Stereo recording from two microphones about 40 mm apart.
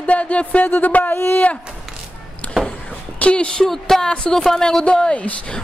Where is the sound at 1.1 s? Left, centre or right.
Left.